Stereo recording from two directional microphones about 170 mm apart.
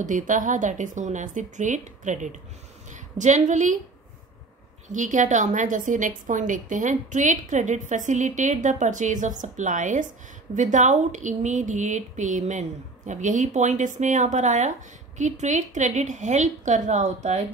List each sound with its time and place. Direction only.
0.0 s a woman's voice: 50° right (ahead or behind)
4.8 s a woman's voice: 45° right (ahead or behind)